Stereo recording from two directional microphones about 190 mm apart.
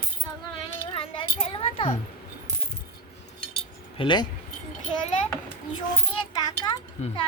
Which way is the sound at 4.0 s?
25° left (ahead or behind).